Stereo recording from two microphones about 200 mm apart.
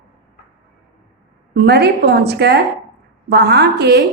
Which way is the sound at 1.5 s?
55° right (ahead or behind).